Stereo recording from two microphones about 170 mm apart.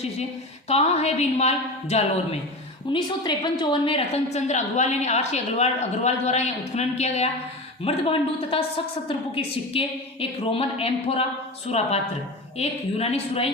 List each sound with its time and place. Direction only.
0.7 s a woman's voice: 40° left (ahead or behind)
2.9 s a woman's voice: 25° left (ahead or behind)
12.5 s a woman's voice: 35° left (ahead or behind)